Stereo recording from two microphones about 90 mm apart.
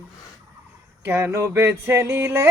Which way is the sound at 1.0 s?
30° right (ahead or behind).